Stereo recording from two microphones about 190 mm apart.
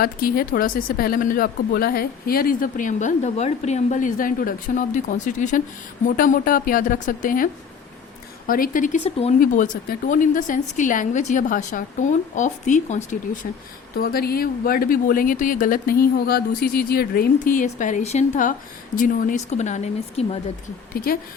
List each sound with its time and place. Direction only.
0.0 s speech: 50° left (ahead or behind); by 9.3 s 30° left (ahead or behind)
10.1 s a woman's voice: 45° left (ahead or behind)
13.9 s a woman's voice: 50° left (ahead or behind); by 20.4 s 35° left (ahead or behind)
20.9 s speech: 50° left (ahead or behind)